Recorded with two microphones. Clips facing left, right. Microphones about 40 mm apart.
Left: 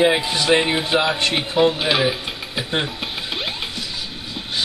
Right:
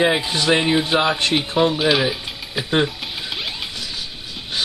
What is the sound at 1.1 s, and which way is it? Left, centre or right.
Speech, left.